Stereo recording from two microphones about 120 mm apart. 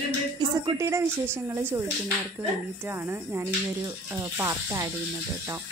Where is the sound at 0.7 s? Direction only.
25° right (ahead or behind).